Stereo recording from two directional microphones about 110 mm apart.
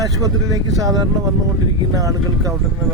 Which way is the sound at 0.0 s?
30° right (ahead or behind).